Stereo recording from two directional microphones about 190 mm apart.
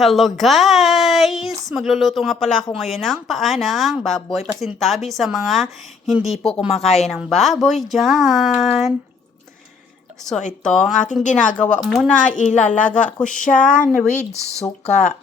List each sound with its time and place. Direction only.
0.0 s speech: centre (ahead or behind)
6.7 s speech: 30° left (ahead or behind)
7.1 s speech: centre (ahead or behind)
10.6 s speech: 5° left (ahead or behind)
10.9 s speech: 40° left (ahead or behind)
11.8 s speech: 5° left (ahead or behind)
12.2 s speech: 40° left (ahead or behind)
12.9 s speech: 5° left (ahead or behind)
13.7 s speech: 40° left (ahead or behind)